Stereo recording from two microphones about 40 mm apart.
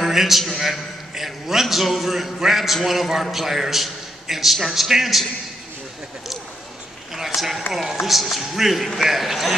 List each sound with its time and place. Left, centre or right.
0.0 s a man's voice: centre
7.2 s a man's voice: centre